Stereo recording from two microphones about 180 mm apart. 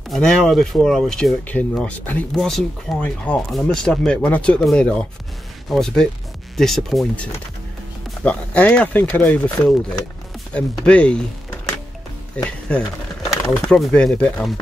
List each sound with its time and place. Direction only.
0.1 s speech: centre (ahead or behind)
12.4 s speech: 5° left (ahead or behind)